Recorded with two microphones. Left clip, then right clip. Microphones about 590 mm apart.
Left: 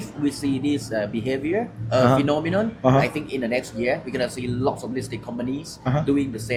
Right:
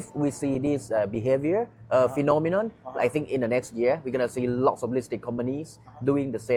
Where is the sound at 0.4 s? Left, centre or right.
Right.